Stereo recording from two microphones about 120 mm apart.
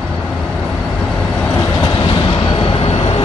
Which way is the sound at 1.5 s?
30° left (ahead or behind).